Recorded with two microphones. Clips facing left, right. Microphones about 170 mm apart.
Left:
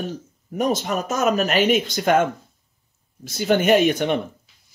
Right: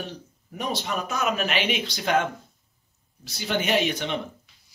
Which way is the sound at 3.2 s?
50° left (ahead or behind).